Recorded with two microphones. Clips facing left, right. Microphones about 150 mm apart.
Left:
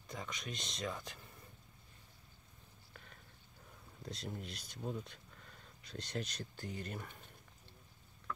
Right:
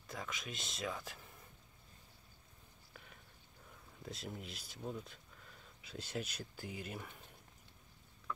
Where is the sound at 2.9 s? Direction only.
5° right (ahead or behind).